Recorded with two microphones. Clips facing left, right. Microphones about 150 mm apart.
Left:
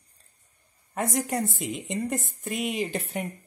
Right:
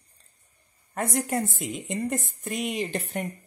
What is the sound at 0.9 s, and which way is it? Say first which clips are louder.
A woman's voice: even; centre (ahead or behind).